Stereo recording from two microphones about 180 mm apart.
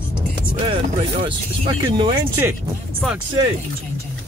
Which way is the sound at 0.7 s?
30° right (ahead or behind).